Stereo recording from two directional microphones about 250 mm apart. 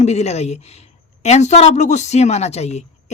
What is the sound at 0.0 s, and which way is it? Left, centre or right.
Speech, left.